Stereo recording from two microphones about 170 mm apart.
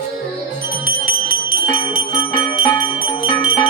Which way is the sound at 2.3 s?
30° left (ahead or behind).